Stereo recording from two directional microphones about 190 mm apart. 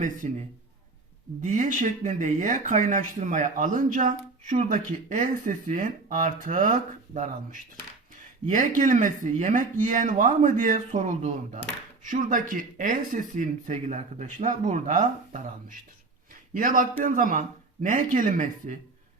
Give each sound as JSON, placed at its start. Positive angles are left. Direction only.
{"t": 0.0, "sound": "a man's voice", "side_deg": -40}
{"t": 16.3, "sound": "a sound", "side_deg": -45}
{"t": 17.0, "sound": "speech", "side_deg": -45}